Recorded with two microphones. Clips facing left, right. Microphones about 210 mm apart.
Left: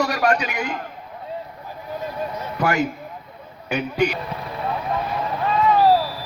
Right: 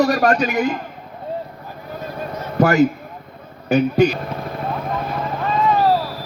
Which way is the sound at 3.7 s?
40° right (ahead or behind).